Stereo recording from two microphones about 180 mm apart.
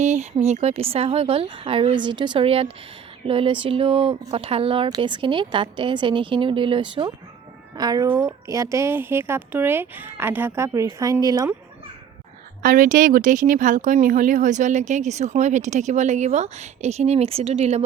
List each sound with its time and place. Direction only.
0.0 s a woman's voice: 40° right (ahead or behind); by 11.5 s 20° right (ahead or behind)
12.6 s speech: 45° right (ahead or behind)